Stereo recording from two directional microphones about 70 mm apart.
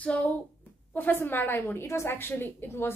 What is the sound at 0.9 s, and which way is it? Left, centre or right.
A woman's voice, left.